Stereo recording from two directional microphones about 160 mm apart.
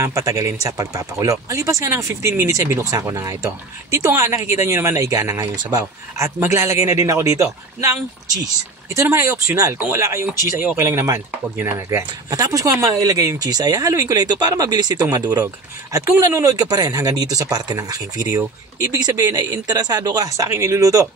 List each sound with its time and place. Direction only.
0.0 s speech: 20° right (ahead or behind)
8.9 s speech: 20° right (ahead or behind)